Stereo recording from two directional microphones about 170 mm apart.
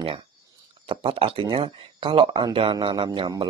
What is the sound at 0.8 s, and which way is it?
Speech, 30° right (ahead or behind).